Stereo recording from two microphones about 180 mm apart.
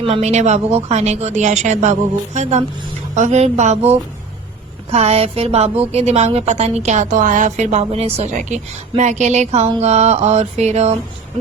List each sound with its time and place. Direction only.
0.0 s a woman's voice: 35° right (ahead or behind)